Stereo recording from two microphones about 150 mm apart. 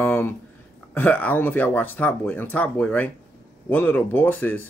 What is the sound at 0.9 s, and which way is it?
Speech, 10° left (ahead or behind).